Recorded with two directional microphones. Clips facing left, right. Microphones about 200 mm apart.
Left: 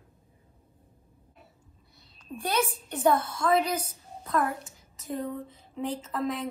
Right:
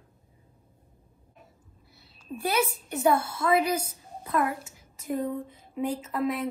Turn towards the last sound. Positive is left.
turn(degrees=-10)  # may be behind; listen again after turning